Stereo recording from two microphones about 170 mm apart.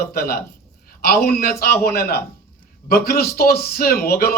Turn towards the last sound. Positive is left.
turn(degrees=65)  # may be behind; listen again after turning